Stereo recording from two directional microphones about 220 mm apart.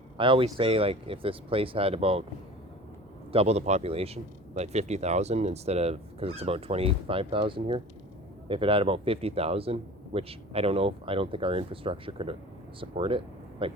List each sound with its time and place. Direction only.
0.2 s speech: 25° right (ahead or behind)
3.3 s speech: 30° right (ahead or behind)